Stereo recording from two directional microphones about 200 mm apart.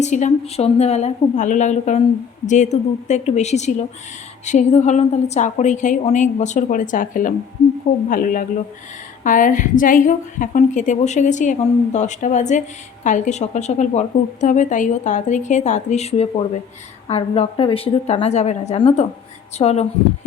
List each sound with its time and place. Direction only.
0.0 s a woman's voice: 35° left (ahead or behind)